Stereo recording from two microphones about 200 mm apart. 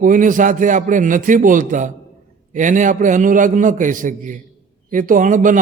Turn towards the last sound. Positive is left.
turn(degrees=-40)  # may be behind; listen again after turning